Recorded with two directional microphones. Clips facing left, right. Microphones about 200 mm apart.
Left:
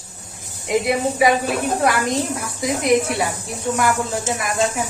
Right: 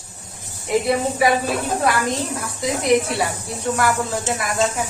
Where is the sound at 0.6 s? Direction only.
15° left (ahead or behind).